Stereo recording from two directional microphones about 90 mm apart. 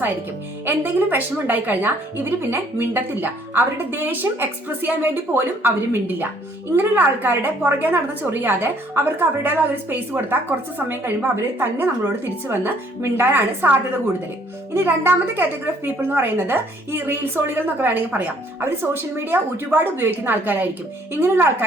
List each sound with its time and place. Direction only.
0.6 s a woman's voice: 25° right (ahead or behind)